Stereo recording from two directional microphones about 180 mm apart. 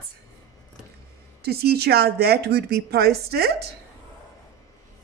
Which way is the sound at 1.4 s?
60° right (ahead or behind).